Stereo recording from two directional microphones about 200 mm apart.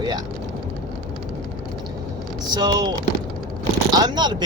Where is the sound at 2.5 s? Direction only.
20° right (ahead or behind).